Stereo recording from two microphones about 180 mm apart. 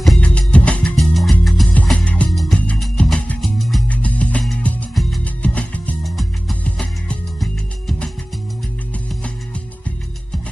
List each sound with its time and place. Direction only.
0.0 s music: 5° left (ahead or behind)